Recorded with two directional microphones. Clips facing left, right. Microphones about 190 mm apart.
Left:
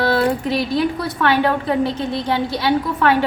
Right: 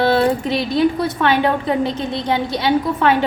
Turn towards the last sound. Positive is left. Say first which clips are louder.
# right 1 dB
turn(degrees=-20)  # may be behind; listen again after turning